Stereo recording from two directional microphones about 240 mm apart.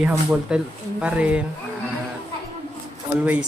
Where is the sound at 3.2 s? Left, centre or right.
Centre.